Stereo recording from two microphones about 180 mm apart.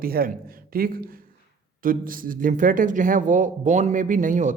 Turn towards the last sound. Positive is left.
turn(degrees=-45)  # may be behind; listen again after turning